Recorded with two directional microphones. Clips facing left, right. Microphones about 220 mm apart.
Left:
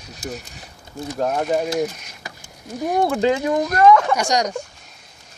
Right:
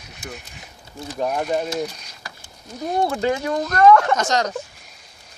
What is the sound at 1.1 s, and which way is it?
Speech, 5° right (ahead or behind).